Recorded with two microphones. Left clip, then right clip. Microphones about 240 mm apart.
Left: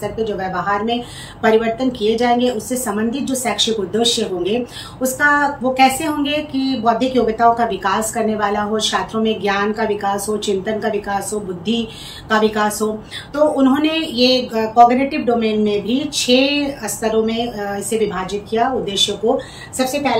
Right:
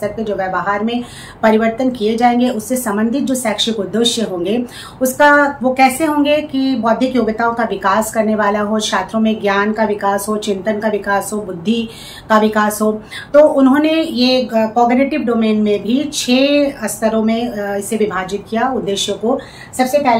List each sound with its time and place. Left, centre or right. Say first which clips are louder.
0.0 s a woman's voice: right 3 dB; centre